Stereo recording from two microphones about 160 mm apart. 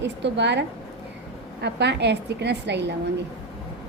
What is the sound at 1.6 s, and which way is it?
A woman's voice, 90° right.